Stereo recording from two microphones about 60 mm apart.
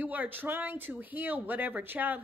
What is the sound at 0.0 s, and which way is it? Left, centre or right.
A woman's voice, right.